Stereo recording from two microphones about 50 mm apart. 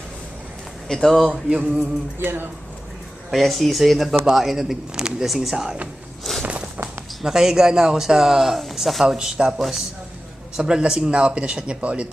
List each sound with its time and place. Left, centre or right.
0.9 s speech: centre
1.3 s a man's voice: centre
1.8 s music: right
3.3 s a man's voice: centre
5.5 s a man's voice: centre
6.3 s walk: centre
7.2 s a man's voice: centre
9.0 s a man's voice: centre
9.6 s speech: centre
10.6 s a man's voice: centre